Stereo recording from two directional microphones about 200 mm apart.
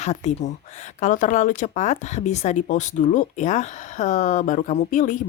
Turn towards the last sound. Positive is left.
turn(degrees=40)  # may be behind; listen again after turning